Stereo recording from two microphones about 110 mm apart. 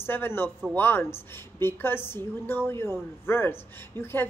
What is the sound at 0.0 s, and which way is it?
A man's voice, 20° left (ahead or behind).